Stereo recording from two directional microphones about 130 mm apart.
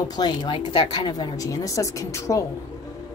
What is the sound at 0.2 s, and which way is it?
A woman's voice, 35° left (ahead or behind).